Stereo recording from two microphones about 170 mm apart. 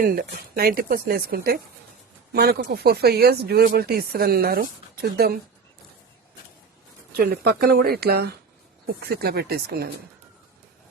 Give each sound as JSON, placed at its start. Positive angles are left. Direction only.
{"t": 0.0, "sound": "speech", "side_deg": -60}
{"t": 7.1, "sound": "speech", "side_deg": -65}